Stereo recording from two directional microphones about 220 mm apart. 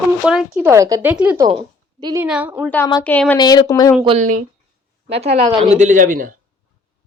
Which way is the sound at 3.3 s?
20° left (ahead or behind).